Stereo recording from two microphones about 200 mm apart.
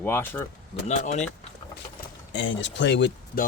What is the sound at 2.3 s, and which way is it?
Speech, 65° left (ahead or behind).